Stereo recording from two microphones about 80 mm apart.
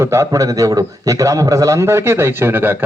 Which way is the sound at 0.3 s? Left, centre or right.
Right.